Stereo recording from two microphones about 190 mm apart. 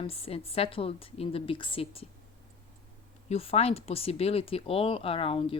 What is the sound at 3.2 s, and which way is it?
A woman's voice, 30° left (ahead or behind).